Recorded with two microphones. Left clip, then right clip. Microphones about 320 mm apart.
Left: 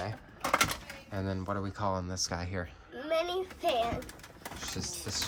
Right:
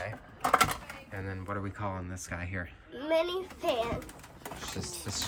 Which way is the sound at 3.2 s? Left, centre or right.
Centre.